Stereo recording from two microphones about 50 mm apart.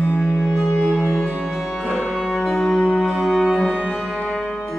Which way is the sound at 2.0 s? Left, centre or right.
Centre.